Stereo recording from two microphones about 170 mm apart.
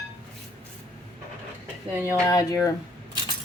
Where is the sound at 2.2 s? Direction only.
20° left (ahead or behind).